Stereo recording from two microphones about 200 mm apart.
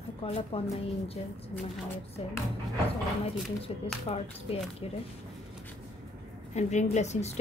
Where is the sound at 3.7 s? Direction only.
25° left (ahead or behind).